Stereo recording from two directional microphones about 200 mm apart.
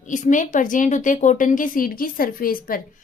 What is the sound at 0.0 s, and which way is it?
A woman's voice, 40° left (ahead or behind).